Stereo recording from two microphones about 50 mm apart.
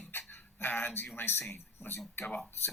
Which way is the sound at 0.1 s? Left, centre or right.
Left.